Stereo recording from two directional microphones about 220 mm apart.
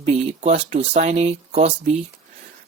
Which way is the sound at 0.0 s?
30° right (ahead or behind).